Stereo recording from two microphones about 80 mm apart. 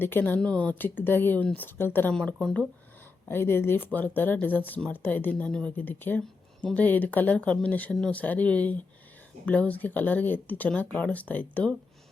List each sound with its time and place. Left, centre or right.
0.0 s speech: left
0.3 s speech: centre
2.1 s speech: centre
3.2 s speech: left